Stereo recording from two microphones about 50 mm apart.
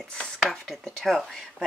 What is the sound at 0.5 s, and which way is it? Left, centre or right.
Speech, centre.